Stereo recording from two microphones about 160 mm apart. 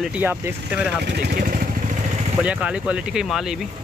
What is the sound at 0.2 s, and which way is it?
Speech, 10° right (ahead or behind).